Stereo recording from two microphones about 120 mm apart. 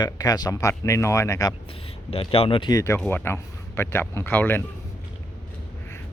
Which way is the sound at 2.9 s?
15° left (ahead or behind).